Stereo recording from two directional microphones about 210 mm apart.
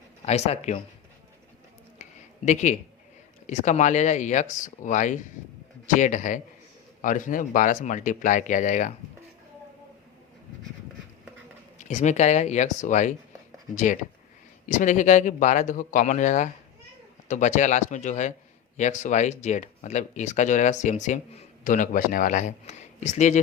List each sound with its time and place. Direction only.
0.3 s speech: 30° left (ahead or behind)
2.0 s a sound: 35° left (ahead or behind)
3.4 s speech: 35° left (ahead or behind)
11.8 s speech: 35° left (ahead or behind)